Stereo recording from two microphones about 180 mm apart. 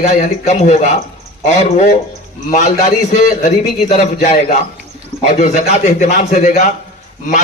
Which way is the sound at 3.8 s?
55° left (ahead or behind).